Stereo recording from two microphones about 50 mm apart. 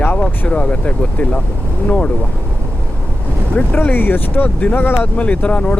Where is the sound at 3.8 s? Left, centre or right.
Left.